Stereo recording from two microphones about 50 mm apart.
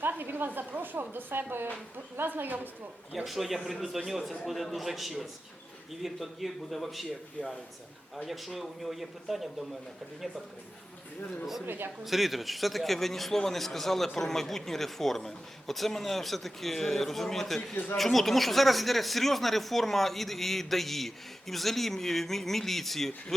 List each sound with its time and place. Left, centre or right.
0.0 s a woman's voice: right
3.2 s a man's voice: centre
11.6 s a man's voice: right
12.0 s a man's voice: centre